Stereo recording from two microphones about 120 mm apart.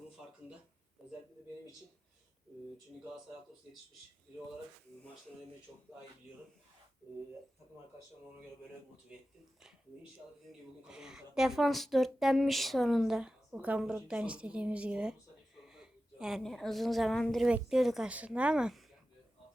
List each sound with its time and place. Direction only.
9.1 s speech: 10° right (ahead or behind)
10.8 s speech: 5° right (ahead or behind)